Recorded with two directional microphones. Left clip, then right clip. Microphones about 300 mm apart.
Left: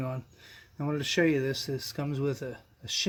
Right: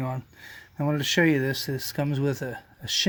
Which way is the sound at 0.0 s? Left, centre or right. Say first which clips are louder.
Right 4 dB; right.